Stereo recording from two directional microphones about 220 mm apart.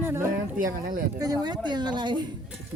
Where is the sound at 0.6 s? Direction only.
40° right (ahead or behind).